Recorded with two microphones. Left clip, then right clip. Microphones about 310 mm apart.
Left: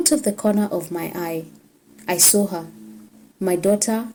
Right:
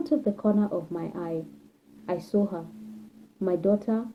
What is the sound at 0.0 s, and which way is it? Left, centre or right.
A woman's voice, left.